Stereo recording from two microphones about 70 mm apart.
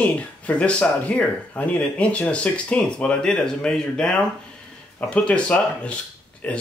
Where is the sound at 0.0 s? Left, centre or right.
Centre.